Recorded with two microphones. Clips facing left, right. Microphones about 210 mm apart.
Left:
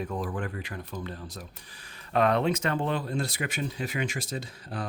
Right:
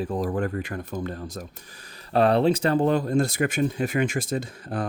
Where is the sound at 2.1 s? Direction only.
35° right (ahead or behind).